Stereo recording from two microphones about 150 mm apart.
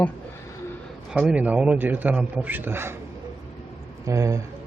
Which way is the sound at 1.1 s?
5° right (ahead or behind).